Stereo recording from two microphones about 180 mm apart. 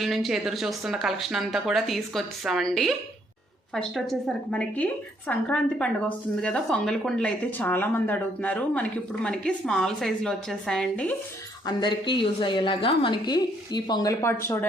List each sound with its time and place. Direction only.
0.0 s speech: centre (ahead or behind)
11.6 s a woman's voice: 25° left (ahead or behind)